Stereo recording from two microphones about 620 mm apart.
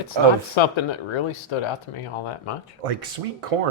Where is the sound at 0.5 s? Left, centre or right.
Left.